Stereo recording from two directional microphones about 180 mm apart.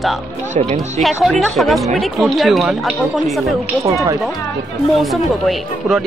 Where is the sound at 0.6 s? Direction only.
40° right (ahead or behind).